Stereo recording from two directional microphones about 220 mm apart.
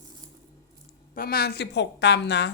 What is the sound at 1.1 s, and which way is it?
A woman's voice, 40° left (ahead or behind).